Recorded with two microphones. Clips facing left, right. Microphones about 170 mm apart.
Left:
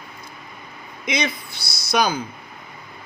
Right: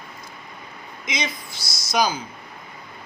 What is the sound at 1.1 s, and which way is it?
Speech, 60° left (ahead or behind).